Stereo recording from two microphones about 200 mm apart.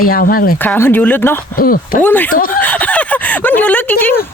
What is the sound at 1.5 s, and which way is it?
Speech, 45° left (ahead or behind).